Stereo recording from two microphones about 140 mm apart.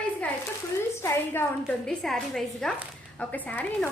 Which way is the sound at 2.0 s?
5° left (ahead or behind).